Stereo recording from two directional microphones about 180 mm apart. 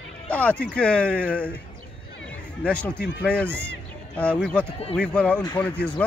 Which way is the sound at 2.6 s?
5° left (ahead or behind).